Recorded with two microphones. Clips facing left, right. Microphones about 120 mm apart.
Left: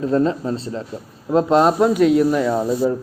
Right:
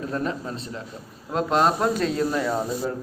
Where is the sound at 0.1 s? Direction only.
30° left (ahead or behind).